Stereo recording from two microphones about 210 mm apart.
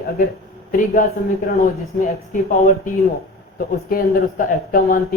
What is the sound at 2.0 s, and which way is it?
Speech, 40° left (ahead or behind).